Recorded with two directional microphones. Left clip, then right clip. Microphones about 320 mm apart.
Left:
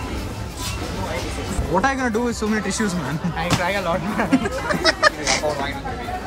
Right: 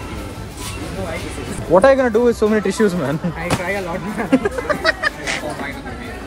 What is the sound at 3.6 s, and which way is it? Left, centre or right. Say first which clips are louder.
Speech: left 1 dB; centre.